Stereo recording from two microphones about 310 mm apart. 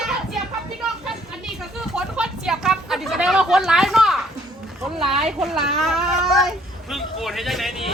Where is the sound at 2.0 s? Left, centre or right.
Centre.